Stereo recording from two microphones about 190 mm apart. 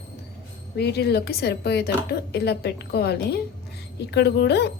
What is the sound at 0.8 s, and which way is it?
A woman's voice, 60° left (ahead or behind).